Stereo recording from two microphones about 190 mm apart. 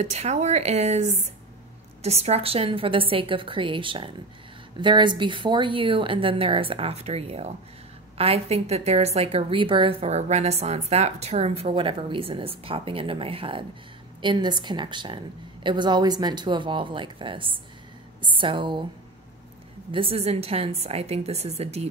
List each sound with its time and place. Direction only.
0.0 s a woman's voice: 35° right (ahead or behind)
19.9 s a woman's voice: 30° right (ahead or behind)